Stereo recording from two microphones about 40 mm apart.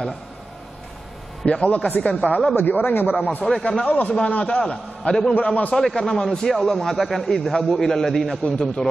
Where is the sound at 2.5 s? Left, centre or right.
Left.